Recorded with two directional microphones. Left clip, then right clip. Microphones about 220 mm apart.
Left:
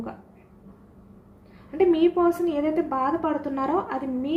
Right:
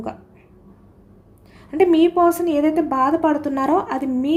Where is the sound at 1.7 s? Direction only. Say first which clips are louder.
Right 5 dB; 55° right (ahead or behind).